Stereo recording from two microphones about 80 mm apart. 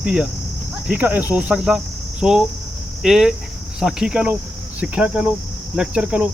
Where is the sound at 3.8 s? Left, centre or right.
Centre.